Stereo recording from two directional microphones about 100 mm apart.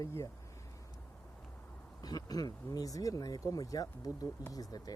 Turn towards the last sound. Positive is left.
turn(degrees=40)  # may be behind; listen again after turning